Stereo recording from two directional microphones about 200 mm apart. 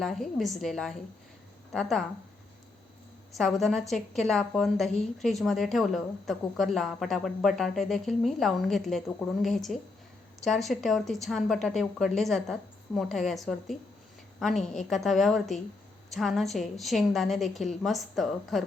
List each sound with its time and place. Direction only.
0.0 s a woman's voice: centre (ahead or behind)
3.3 s a woman's voice: centre (ahead or behind)